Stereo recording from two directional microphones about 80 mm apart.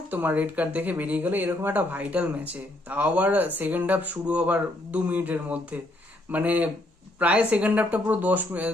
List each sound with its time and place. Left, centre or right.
0.1 s speech: right